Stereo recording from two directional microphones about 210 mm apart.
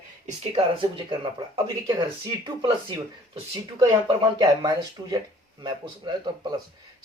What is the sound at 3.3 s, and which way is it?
Speech, 20° right (ahead or behind).